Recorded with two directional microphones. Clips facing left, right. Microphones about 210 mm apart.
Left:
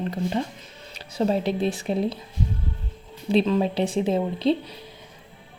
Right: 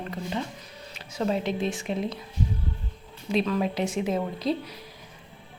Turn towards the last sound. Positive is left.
turn(degrees=30)  # may be behind; listen again after turning